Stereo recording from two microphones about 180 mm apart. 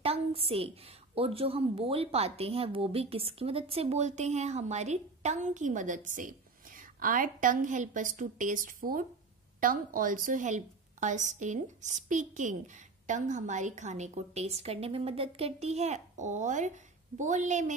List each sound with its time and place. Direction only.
0.0 s a woman's voice: 30° right (ahead or behind)